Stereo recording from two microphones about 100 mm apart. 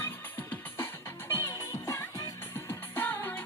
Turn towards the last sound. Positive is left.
turn(degrees=20)  # may be behind; listen again after turning